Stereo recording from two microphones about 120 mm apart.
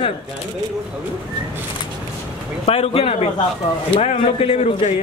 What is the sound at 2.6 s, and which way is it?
A man's voice, 55° left (ahead or behind).